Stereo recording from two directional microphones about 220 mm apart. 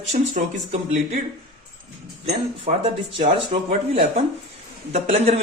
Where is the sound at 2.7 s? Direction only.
35° right (ahead or behind).